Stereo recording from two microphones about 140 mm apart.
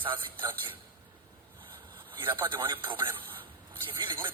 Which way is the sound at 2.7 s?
35° right (ahead or behind).